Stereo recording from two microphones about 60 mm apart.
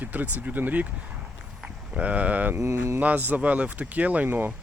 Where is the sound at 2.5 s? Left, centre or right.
Right.